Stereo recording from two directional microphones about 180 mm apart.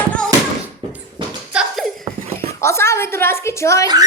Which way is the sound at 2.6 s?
15° left (ahead or behind).